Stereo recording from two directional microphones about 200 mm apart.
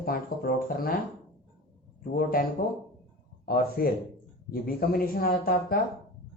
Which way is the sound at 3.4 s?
50° left (ahead or behind).